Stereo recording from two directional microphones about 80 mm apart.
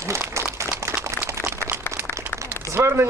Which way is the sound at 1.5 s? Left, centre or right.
Right.